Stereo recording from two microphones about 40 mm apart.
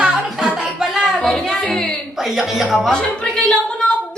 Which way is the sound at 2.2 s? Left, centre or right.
Centre.